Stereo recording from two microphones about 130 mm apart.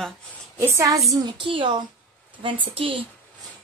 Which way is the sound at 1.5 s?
40° right (ahead or behind).